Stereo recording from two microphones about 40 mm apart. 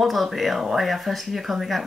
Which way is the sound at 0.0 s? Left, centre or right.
Centre.